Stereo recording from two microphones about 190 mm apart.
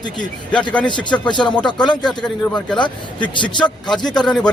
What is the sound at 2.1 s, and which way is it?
Speech, 5° left (ahead or behind).